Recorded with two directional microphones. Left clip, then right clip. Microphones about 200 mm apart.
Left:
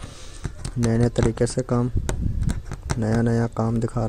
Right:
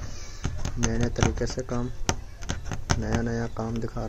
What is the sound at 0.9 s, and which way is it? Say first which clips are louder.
Speech: left 6 dB; 35° left (ahead or behind).